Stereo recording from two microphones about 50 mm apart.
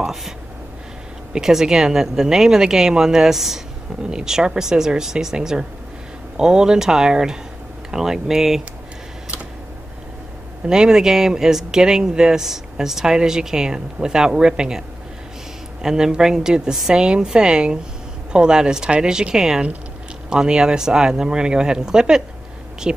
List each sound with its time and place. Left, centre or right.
0.0 s speech: centre
1.3 s speech: centre
10.7 s speech: centre
15.8 s speech: centre